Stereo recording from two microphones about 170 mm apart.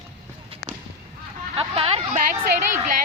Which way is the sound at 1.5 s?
35° right (ahead or behind).